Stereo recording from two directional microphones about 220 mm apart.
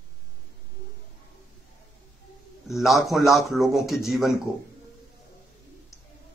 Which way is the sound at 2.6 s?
Centre (ahead or behind).